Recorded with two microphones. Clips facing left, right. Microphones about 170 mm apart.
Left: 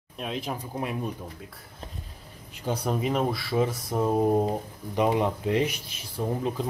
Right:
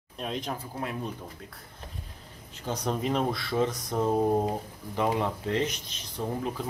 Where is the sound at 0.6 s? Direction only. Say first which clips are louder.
Left 3 dB; 15° left (ahead or behind).